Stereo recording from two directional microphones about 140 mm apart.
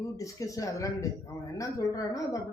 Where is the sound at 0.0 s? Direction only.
25° left (ahead or behind).